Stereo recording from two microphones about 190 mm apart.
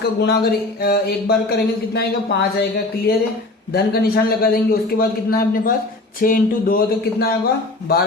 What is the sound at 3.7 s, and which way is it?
A man's voice, 55° left (ahead or behind).